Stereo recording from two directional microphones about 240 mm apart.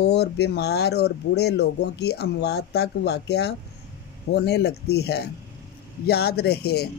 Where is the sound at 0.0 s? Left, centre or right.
Left.